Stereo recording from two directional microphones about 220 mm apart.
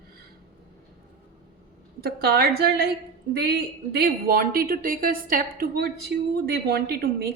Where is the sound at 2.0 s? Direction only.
45° right (ahead or behind).